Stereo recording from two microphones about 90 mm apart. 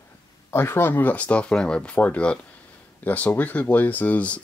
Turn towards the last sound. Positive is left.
turn(degrees=15)  # may be behind; listen again after turning